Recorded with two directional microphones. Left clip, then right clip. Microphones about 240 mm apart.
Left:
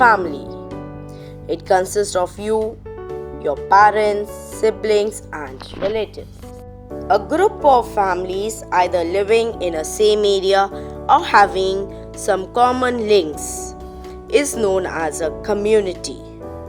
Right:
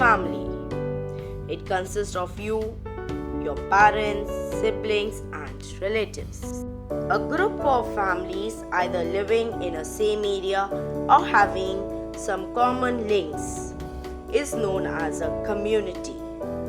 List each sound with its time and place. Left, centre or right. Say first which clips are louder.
1.5 s a woman's voice: left 11 dB; left
3.7 s a woman's voice: left 6 dB; left
7.1 s a woman's voice: left 8 dB; left